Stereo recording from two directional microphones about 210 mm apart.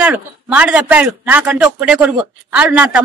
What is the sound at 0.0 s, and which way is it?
A man's voice, 5° right (ahead or behind).